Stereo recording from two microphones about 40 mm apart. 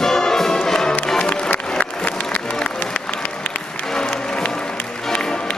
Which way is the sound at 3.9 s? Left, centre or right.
Left.